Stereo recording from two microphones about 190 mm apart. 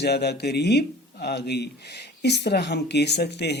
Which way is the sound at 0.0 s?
60° left (ahead or behind).